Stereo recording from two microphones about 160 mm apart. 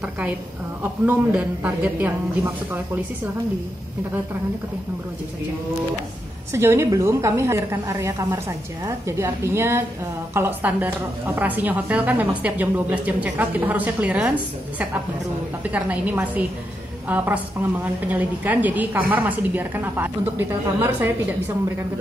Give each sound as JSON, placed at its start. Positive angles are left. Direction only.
{"t": 1.0, "sound": "a woman's voice", "side_deg": -10}
{"t": 6.5, "sound": "a woman's voice", "side_deg": -15}
{"t": 15.7, "sound": "a woman's voice", "side_deg": -10}